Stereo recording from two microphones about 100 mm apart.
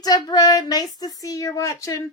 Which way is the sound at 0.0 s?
40° left (ahead or behind).